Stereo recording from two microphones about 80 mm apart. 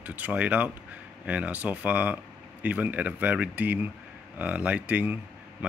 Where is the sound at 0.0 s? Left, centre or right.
Centre.